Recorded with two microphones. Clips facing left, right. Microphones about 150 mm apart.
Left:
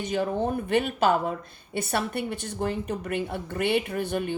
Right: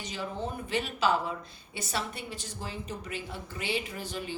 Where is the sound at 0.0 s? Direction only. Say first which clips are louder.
Left 9 dB; 55° left (ahead or behind).